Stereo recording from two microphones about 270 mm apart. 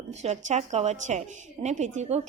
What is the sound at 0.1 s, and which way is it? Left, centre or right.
A woman's voice, right.